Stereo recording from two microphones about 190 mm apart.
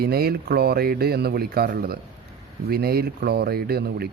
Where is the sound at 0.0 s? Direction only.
55° right (ahead or behind).